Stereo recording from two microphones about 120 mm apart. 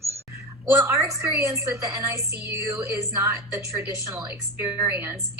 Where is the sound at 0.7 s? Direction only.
25° right (ahead or behind).